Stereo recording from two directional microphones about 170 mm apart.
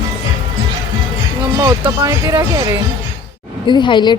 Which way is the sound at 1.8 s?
20° right (ahead or behind).